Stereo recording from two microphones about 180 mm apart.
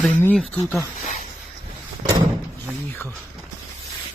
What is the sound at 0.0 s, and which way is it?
Speech, 10° left (ahead or behind).